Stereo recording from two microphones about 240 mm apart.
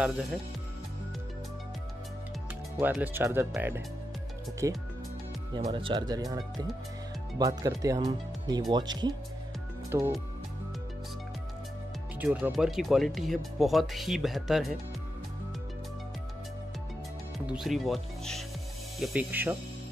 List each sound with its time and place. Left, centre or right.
0.0 s speech: centre
2.8 s speech: centre
12.2 s speech: centre
17.5 s speech: centre